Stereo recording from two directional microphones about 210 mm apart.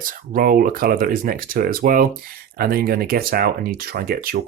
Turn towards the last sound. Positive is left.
turn(degrees=-45)  # may be behind; listen again after turning